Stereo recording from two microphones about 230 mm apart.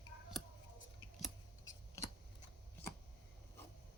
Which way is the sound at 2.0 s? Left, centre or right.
Centre.